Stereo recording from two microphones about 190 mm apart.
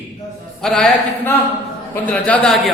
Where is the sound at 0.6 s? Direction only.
5° left (ahead or behind).